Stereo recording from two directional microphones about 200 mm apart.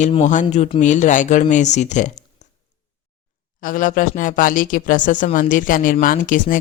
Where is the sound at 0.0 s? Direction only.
35° left (ahead or behind).